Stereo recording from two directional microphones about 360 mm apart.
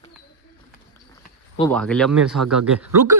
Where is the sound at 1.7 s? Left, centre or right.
Centre.